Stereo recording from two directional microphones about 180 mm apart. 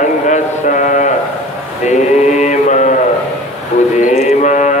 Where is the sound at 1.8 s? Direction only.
40° left (ahead or behind).